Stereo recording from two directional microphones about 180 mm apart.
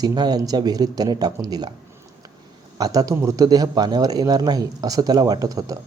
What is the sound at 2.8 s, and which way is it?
A man's voice, 20° right (ahead or behind).